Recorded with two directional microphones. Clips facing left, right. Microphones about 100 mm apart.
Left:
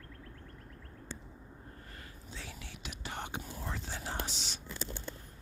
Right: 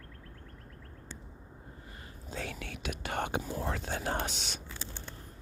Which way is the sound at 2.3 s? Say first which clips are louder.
Right 9 dB; 60° right (ahead or behind).